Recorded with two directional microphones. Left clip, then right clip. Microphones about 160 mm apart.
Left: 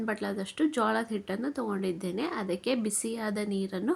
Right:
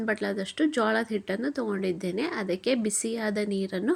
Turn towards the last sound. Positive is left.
turn(degrees=-15)  # may be behind; listen again after turning